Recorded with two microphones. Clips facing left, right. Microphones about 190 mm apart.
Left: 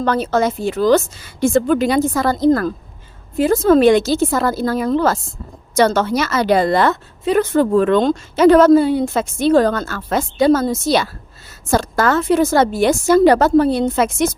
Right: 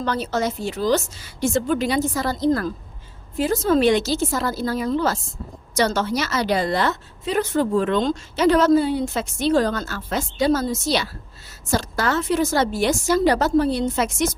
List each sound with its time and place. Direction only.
0.0 s a woman's voice: 55° left (ahead or behind)